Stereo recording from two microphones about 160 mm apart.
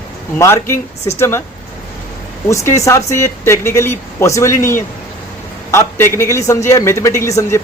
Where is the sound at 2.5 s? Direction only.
20° left (ahead or behind).